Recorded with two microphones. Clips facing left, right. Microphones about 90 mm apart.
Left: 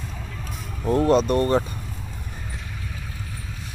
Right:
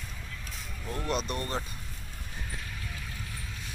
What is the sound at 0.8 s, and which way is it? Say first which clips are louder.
Speech: left 14 dB; 40° left (ahead or behind).